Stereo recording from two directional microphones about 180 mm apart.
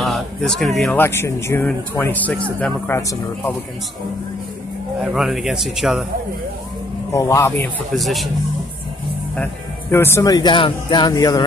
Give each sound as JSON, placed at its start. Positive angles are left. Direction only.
{"t": 0.0, "sound": "speech", "side_deg": 0}
{"t": 0.8, "sound": "speech", "side_deg": 10}
{"t": 5.0, "sound": "a man's voice", "side_deg": 0}
{"t": 7.1, "sound": "speech", "side_deg": 15}
{"t": 7.9, "sound": "a man's voice", "side_deg": 0}
{"t": 9.4, "sound": "speech", "side_deg": 10}